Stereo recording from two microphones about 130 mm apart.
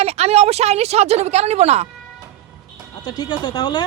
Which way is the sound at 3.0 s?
30° left (ahead or behind).